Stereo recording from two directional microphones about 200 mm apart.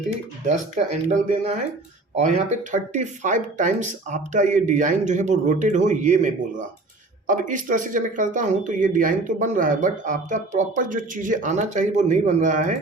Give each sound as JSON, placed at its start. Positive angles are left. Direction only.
{"t": 0.4, "sound": "speech", "side_deg": -35}